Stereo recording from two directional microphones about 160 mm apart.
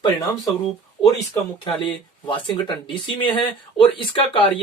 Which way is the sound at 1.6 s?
30° left (ahead or behind).